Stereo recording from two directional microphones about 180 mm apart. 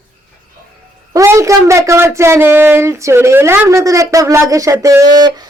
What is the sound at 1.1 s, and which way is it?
Speech, 15° right (ahead or behind).